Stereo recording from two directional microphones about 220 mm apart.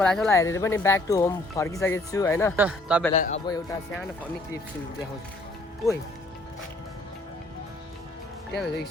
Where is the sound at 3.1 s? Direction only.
30° left (ahead or behind).